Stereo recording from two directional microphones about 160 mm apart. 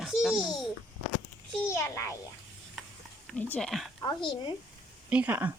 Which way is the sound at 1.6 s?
15° left (ahead or behind).